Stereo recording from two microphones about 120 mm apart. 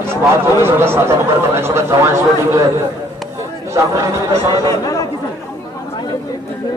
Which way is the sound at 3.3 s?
25° right (ahead or behind).